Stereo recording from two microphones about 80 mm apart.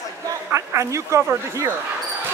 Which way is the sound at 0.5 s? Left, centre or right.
Right.